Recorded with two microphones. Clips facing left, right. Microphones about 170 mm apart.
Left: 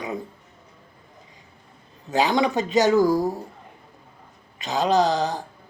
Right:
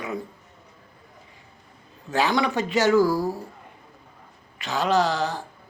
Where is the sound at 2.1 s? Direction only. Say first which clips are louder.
Left 2 dB; 20° left (ahead or behind).